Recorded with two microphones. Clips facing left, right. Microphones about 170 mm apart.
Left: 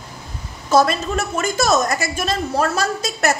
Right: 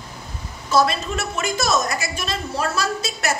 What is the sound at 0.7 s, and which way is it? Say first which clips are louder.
A woman's voice: left 3 dB; 45° left (ahead or behind).